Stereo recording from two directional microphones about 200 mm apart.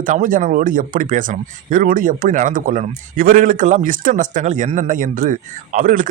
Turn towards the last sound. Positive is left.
turn(degrees=-40)  # may be behind; listen again after turning